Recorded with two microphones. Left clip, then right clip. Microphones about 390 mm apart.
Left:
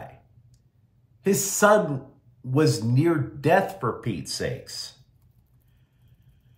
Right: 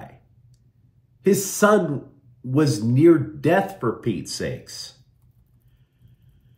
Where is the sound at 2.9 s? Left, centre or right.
Centre.